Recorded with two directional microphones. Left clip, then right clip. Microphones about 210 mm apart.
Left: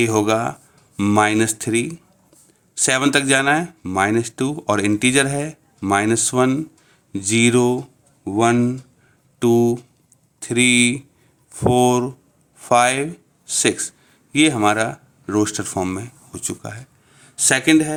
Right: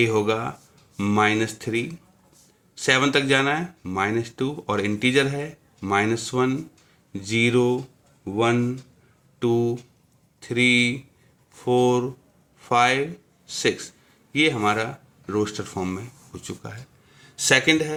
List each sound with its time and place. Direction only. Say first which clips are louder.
0.0 s speech: left 4 dB; 50° left (ahead or behind); by 17.9 s 35° left (ahead or behind)